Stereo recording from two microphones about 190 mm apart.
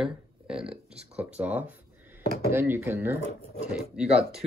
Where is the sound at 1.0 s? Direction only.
35° right (ahead or behind).